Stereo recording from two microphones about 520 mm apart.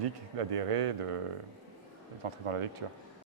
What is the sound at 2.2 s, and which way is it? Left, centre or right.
Speech, right.